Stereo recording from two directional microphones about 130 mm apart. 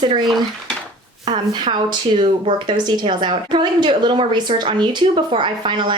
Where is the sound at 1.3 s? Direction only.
30° right (ahead or behind).